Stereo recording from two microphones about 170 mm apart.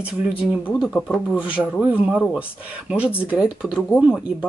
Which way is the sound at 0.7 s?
5° right (ahead or behind).